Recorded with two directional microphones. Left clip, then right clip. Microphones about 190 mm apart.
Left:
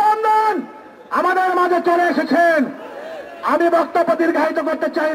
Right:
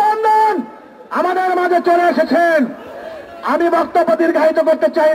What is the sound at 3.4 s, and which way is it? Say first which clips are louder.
A man's voice: right 1 dB; 15° left (ahead or behind).